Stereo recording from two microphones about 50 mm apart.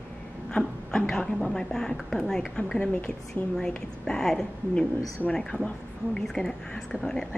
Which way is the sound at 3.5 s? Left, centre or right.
Centre.